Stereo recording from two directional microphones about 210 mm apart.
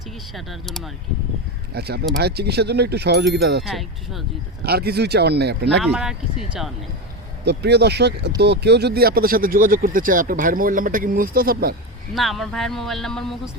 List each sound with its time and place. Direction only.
0.3 s speech: centre (ahead or behind)
1.7 s speech: 50° right (ahead or behind)
3.6 s speech: centre (ahead or behind)
4.6 s speech: 50° right (ahead or behind)
5.8 s speech: 5° right (ahead or behind)
7.4 s speech: 55° right (ahead or behind)
12.1 s speech: centre (ahead or behind)